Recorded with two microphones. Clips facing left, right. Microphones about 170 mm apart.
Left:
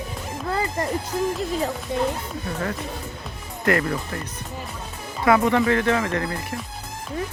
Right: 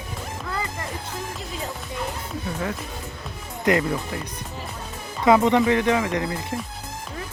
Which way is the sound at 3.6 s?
15° right (ahead or behind).